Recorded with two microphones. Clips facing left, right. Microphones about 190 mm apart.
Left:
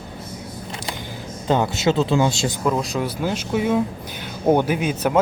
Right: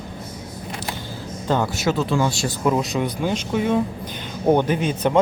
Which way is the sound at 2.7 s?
Centre (ahead or behind).